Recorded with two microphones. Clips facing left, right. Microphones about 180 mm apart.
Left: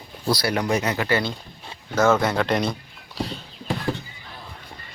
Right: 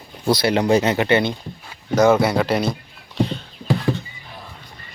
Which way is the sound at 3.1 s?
Centre (ahead or behind).